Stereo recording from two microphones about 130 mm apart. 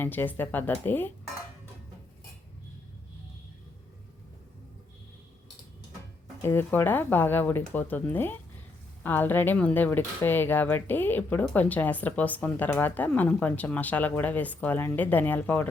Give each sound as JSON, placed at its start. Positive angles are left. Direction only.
{"t": 0.0, "sound": "speech", "side_deg": 15}
{"t": 6.4, "sound": "speech", "side_deg": 20}